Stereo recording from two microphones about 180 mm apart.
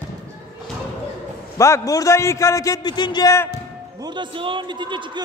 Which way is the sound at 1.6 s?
15° left (ahead or behind).